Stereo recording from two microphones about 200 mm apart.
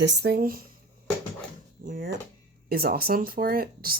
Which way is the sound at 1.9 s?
45° right (ahead or behind).